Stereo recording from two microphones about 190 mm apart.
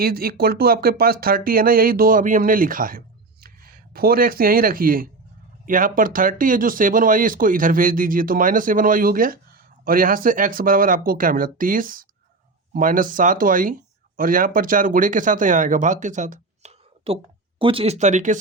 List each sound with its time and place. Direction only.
0.0 s speech: 50° right (ahead or behind)